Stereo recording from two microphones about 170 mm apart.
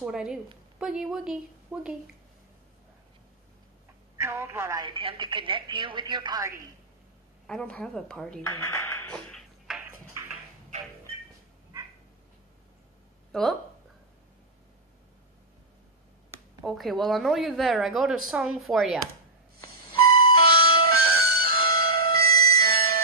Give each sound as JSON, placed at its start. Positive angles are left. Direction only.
{"t": 0.0, "sound": "a woman's voice", "side_deg": -5}
{"t": 4.2, "sound": "speech", "side_deg": -15}
{"t": 4.8, "sound": "a woman's voice", "side_deg": -30}
{"t": 7.4, "sound": "speech", "side_deg": 5}
{"t": 9.8, "sound": "a sound", "side_deg": -15}
{"t": 13.3, "sound": "speech", "side_deg": 0}
{"t": 16.6, "sound": "a woman's voice", "side_deg": 0}
{"t": 20.0, "sound": "music", "side_deg": -60}